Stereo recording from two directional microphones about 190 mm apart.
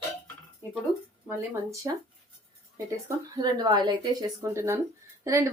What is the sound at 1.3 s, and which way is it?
Speech, 15° right (ahead or behind).